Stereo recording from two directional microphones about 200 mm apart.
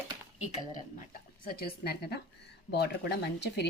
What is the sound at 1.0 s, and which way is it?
Speech, 45° left (ahead or behind).